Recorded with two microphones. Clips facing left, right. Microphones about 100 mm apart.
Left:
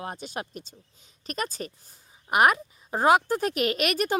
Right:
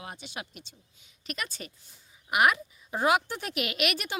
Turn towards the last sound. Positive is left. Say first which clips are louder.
# left 6 dB
turn(degrees=40)  # may be behind; listen again after turning